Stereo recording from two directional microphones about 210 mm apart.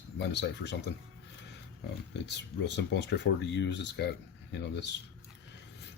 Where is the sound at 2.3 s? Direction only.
55° left (ahead or behind).